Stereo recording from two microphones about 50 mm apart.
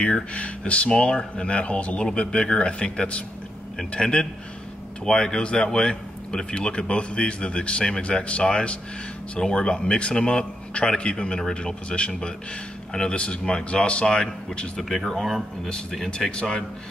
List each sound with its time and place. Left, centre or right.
0.0 s a man's voice: left
13.1 s speech: centre
14.8 s speech: centre
16.1 s a man's voice: centre